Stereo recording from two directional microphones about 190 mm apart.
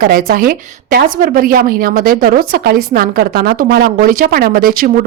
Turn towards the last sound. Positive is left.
turn(degrees=-50)  # may be behind; listen again after turning